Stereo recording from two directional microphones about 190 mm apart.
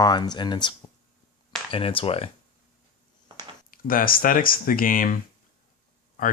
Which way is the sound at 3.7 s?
50° left (ahead or behind).